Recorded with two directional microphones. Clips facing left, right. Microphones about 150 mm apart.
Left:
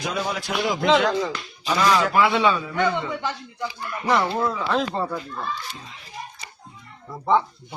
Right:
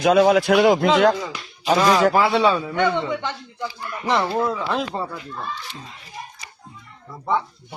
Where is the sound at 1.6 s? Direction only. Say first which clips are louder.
Right 4 dB; 35° right (ahead or behind).